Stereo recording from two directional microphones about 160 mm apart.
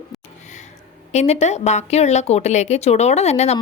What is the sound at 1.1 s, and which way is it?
Speech, 45° left (ahead or behind).